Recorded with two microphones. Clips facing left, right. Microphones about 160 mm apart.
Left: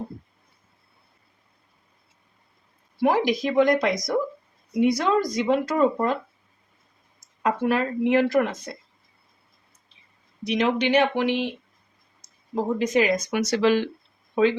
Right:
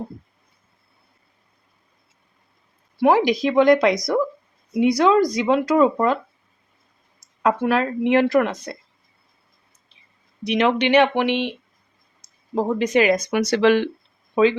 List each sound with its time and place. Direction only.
3.0 s speech: 80° right
7.4 s a woman's voice: 85° right
10.4 s a woman's voice: 70° right (ahead or behind)